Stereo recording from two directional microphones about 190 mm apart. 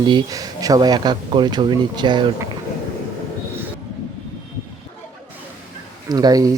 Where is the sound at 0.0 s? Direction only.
25° right (ahead or behind).